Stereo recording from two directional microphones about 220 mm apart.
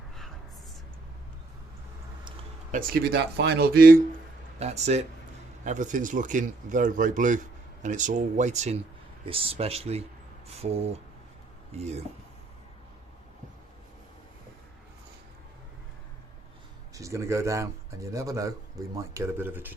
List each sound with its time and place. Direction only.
2.7 s speech: 45° right (ahead or behind)
4.6 s speech: 30° right (ahead or behind)
16.9 s speech: 15° right (ahead or behind)